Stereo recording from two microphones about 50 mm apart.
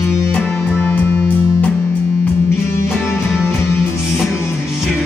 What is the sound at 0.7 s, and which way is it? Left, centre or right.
Music, left.